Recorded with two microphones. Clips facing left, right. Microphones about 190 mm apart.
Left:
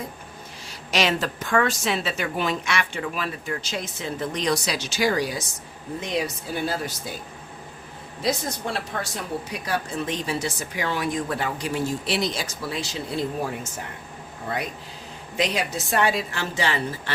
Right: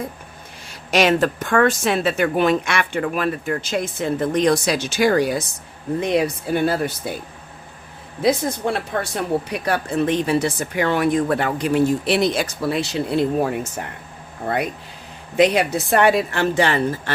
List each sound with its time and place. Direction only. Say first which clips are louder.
0.7 s a woman's voice: right 7 dB; 55° right (ahead or behind)
8.2 s a woman's voice: right 7 dB; 55° right (ahead or behind)